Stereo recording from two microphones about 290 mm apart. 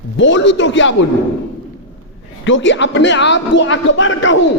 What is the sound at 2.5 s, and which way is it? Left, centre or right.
A man's voice, left.